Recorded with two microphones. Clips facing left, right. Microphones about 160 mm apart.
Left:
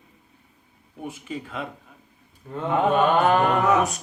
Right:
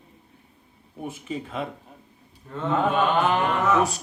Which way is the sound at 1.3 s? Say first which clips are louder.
Right 3 dB; 30° right (ahead or behind).